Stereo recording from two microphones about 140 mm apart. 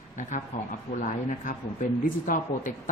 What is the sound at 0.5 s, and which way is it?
Speech, 60° left (ahead or behind).